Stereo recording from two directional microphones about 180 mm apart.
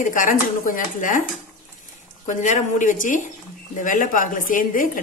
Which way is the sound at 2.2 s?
45° left (ahead or behind).